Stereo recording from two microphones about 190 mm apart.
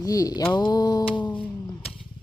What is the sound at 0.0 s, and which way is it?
Speech, 20° left (ahead or behind).